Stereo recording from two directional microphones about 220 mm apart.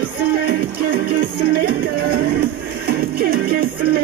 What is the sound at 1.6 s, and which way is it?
Music, 45° right (ahead or behind).